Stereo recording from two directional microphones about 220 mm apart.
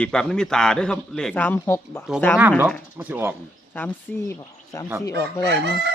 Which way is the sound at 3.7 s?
10° left (ahead or behind).